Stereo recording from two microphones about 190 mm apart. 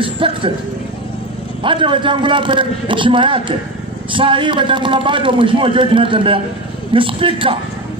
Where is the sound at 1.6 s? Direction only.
25° right (ahead or behind).